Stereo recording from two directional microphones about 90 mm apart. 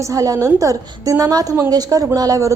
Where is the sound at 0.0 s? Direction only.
40° right (ahead or behind).